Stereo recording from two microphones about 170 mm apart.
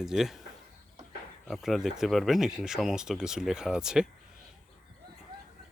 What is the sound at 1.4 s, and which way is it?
Speech, centre (ahead or behind).